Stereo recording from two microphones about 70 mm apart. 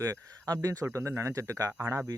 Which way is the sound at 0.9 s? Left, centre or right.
Right.